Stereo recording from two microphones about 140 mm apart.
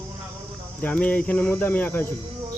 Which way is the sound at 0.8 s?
10° left (ahead or behind).